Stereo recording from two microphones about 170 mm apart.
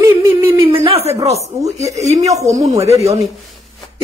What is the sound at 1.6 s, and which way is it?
Speech, 20° right (ahead or behind).